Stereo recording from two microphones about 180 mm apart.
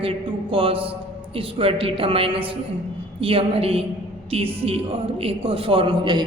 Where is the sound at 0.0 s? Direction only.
30° right (ahead or behind).